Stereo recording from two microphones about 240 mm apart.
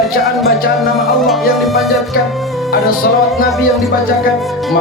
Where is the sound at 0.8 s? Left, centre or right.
Centre.